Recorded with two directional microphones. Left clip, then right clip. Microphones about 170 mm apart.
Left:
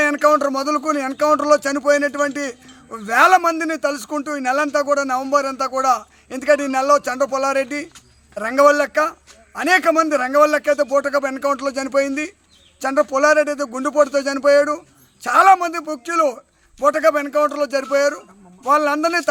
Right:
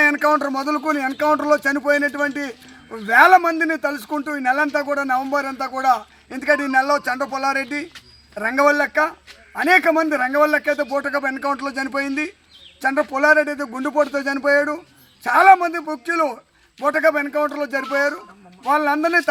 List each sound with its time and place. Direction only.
0.0 s a man's voice: 30° left (ahead or behind)
13.1 s a man's voice: 25° left (ahead or behind)